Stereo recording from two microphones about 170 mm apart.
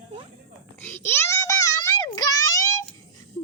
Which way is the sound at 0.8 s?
10° left (ahead or behind).